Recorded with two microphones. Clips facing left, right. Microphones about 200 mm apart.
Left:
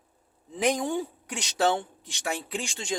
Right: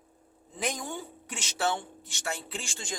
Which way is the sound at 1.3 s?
15° left (ahead or behind).